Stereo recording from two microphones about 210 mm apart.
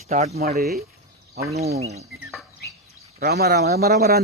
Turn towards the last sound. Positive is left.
turn(degrees=-50)  # may be behind; listen again after turning